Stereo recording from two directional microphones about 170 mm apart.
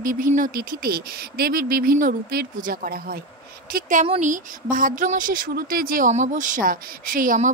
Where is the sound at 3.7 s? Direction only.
50° right (ahead or behind).